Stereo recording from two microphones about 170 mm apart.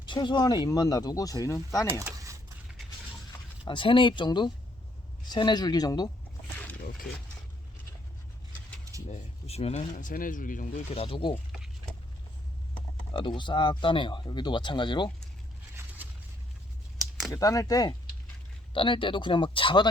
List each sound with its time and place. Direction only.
0.0 s speech: 30° left (ahead or behind)
2.0 s a sound: 20° right (ahead or behind)
3.7 s speech: 30° left (ahead or behind)
9.0 s speech: 40° left (ahead or behind)
10.8 s speech: 35° left (ahead or behind)
13.1 s speech: 30° left (ahead or behind)
17.3 s speech: 20° left (ahead or behind)